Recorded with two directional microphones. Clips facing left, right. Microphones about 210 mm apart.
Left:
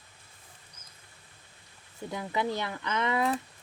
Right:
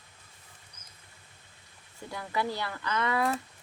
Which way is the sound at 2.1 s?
20° left (ahead or behind).